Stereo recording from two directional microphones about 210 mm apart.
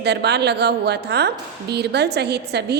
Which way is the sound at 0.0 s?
50° right (ahead or behind).